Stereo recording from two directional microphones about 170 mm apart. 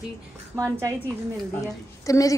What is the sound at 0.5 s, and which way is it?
Speech, 20° right (ahead or behind).